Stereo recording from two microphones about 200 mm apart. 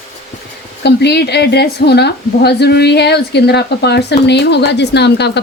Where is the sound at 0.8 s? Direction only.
55° left (ahead or behind).